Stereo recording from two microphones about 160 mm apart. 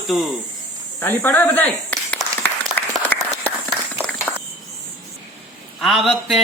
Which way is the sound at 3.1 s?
20° right (ahead or behind).